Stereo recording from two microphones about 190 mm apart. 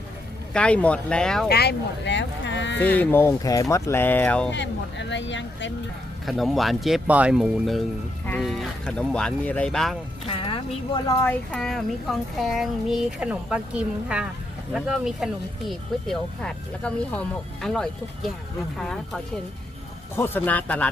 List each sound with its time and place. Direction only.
0.5 s speech: 5° left (ahead or behind)
1.5 s speech: 60° left (ahead or behind)
3.0 s speech: 10° left (ahead or behind)
4.5 s speech: 70° left (ahead or behind)
6.2 s speech: centre (ahead or behind)
10.2 s speech: 30° left (ahead or behind)
10.9 s speech: 15° left (ahead or behind)